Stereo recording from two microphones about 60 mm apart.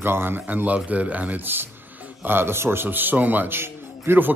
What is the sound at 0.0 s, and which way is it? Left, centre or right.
Speech, right.